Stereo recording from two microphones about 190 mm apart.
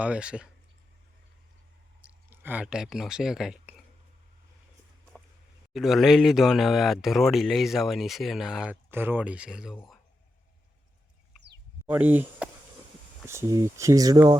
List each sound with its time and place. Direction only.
0.0 s speech: 5° right (ahead or behind)
2.0 s speech: 10° right (ahead or behind)
5.7 s speech: centre (ahead or behind)
11.9 s speech: 10° right (ahead or behind)